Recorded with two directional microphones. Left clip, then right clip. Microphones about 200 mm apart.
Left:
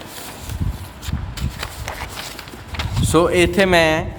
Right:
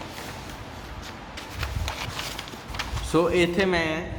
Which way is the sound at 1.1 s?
45° left (ahead or behind).